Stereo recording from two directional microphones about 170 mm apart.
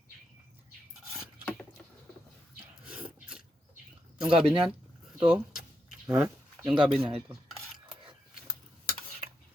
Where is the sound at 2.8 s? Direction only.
5° right (ahead or behind).